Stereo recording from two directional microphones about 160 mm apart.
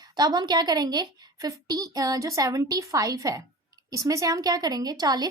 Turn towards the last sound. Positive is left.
turn(degrees=-25)  # may be behind; listen again after turning